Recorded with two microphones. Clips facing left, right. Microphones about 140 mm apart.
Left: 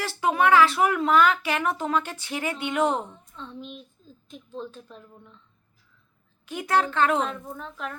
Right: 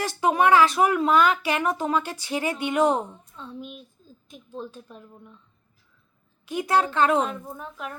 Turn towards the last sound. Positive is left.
turn(degrees=-10)  # may be behind; listen again after turning